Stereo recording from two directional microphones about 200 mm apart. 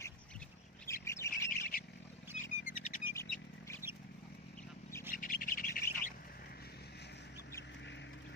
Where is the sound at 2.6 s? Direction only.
40° left (ahead or behind).